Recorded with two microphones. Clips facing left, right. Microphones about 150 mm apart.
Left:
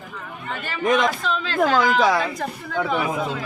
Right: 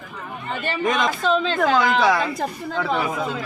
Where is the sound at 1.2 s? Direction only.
30° right (ahead or behind).